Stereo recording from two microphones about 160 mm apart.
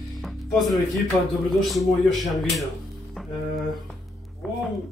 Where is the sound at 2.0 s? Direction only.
Centre (ahead or behind).